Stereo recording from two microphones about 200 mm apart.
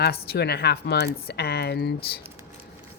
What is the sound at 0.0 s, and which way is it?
A woman's voice, 55° left (ahead or behind).